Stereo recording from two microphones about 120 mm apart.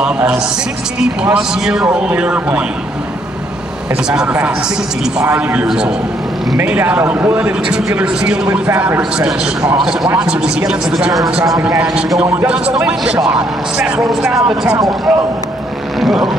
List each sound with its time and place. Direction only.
0.0 s a man's voice: 10° right (ahead or behind)
3.9 s a man's voice: 10° right (ahead or behind)
14.8 s speech: 30° right (ahead or behind)
16.0 s vehicle: centre (ahead or behind)